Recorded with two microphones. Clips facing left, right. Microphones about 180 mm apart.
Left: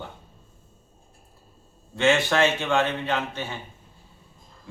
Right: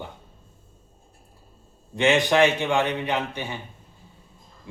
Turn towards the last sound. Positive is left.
turn(degrees=-15)  # may be behind; listen again after turning